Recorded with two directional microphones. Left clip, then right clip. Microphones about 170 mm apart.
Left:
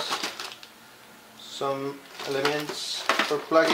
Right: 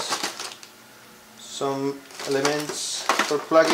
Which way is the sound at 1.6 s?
25° right (ahead or behind).